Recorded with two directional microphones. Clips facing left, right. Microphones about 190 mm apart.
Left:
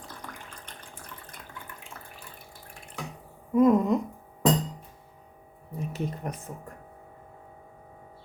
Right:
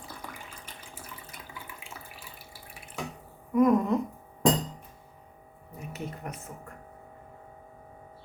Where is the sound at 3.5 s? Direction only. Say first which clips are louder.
Left 2 dB; 25° left (ahead or behind).